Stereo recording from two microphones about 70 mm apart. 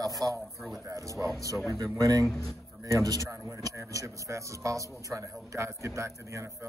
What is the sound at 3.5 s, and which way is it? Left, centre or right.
A man's voice, right.